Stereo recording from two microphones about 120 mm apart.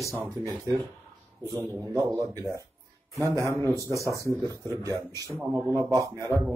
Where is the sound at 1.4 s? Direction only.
25° right (ahead or behind).